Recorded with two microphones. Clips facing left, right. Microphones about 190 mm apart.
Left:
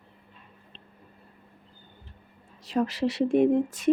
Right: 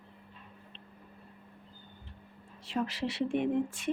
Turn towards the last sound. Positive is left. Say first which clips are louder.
# left 8 dB
turn(degrees=40)  # may be behind; listen again after turning